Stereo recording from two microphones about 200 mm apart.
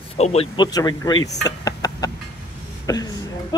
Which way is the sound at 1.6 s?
20° left (ahead or behind).